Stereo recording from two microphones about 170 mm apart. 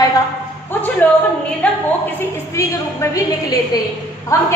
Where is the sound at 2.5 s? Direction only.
20° left (ahead or behind).